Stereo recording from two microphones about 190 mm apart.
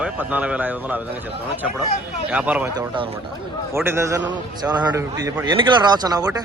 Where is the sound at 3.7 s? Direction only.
15° right (ahead or behind).